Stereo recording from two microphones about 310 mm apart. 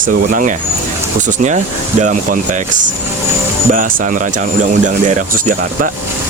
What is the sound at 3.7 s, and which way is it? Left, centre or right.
Speech, right.